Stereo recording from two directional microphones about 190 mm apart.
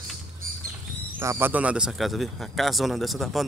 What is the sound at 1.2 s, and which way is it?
Speech, 15° right (ahead or behind).